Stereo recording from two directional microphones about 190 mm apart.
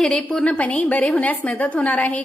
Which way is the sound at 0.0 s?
5° left (ahead or behind).